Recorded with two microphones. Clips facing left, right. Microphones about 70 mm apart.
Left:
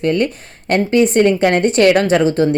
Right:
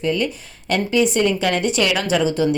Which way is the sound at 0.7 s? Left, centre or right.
Left.